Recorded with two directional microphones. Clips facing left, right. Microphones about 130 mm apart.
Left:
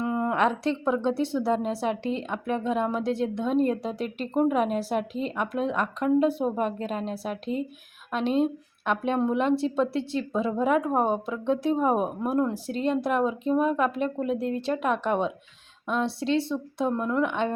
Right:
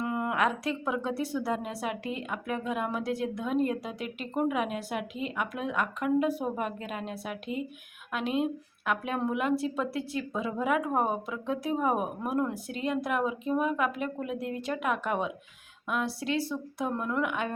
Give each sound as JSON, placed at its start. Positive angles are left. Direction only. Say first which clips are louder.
{"t": 0.0, "sound": "a woman's voice", "louder": "left 4 dB", "side_deg": 25}